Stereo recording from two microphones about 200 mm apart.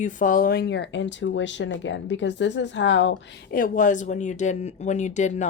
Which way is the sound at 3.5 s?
40° left (ahead or behind).